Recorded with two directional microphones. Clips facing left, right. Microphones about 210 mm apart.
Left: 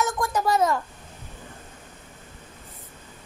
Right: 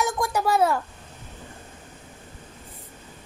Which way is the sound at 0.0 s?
10° right (ahead or behind).